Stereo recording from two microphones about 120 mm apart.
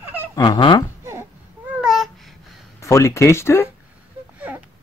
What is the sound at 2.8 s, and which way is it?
Speech, 25° left (ahead or behind).